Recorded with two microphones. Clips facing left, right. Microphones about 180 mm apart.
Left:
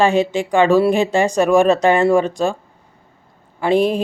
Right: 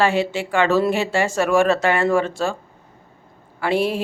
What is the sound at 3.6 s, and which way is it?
Speech, 20° left (ahead or behind).